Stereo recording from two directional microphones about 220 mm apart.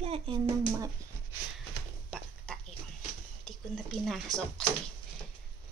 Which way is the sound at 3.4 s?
Centre (ahead or behind).